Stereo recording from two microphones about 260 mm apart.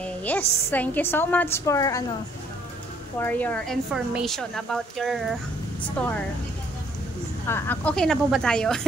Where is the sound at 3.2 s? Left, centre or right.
Centre.